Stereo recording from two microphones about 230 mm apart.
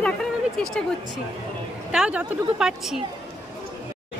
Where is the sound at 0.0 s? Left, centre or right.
Centre.